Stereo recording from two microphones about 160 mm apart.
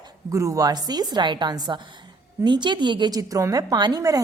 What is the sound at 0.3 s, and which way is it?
A woman's voice, 20° right (ahead or behind).